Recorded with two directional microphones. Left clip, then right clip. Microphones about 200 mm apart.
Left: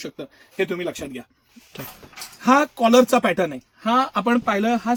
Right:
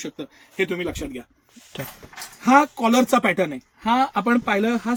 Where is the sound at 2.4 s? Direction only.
25° left (ahead or behind).